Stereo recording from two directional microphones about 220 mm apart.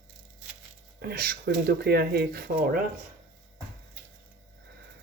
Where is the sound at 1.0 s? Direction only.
45° right (ahead or behind).